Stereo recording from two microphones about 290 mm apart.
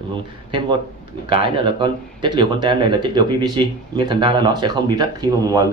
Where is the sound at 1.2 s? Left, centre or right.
Centre.